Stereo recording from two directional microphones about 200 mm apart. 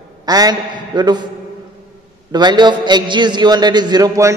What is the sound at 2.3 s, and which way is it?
A man's voice, 20° right (ahead or behind).